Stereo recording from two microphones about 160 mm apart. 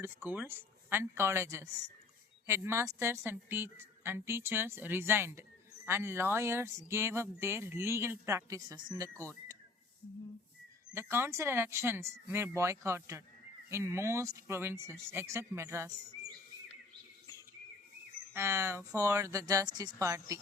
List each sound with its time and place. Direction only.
0.0 s a woman's voice: 15° right (ahead or behind)
10.9 s a woman's voice: 15° right (ahead or behind)
18.3 s speech: 15° right (ahead or behind)